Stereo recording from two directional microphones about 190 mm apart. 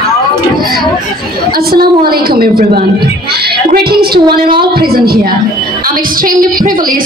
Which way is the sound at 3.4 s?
55° right (ahead or behind).